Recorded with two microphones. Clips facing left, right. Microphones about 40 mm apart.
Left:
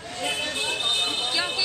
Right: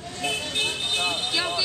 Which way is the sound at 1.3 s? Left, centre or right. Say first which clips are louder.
Right 1 dB; centre.